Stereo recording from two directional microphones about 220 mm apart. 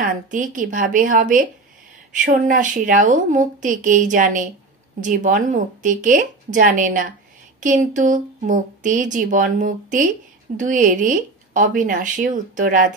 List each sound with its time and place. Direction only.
0.0 s speech: 35° right (ahead or behind)